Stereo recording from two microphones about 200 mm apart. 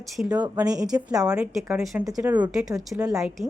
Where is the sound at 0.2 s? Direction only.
5° right (ahead or behind).